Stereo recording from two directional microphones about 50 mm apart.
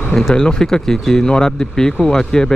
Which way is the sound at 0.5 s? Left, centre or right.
Centre.